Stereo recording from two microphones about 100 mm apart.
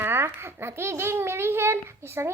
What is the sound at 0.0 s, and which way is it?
A child's voice, 25° right (ahead or behind).